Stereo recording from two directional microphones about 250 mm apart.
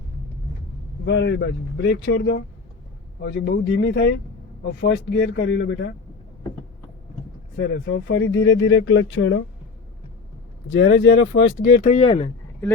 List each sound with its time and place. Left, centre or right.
1.0 s speech: left
7.5 s speech: left
10.7 s speech: left
11.9 s speech: left